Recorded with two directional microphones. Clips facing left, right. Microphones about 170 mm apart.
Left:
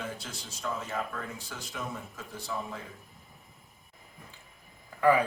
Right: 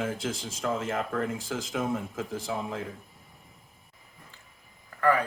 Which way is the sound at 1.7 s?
50° right (ahead or behind).